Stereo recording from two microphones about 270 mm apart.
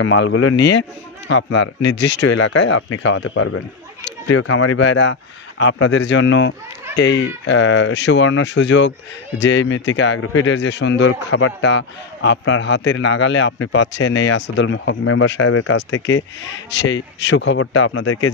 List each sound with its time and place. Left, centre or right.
0.0 s a man's voice: left
0.7 s a man's voice: left